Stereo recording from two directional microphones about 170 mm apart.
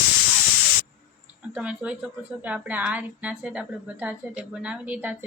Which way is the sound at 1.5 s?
5° right (ahead or behind).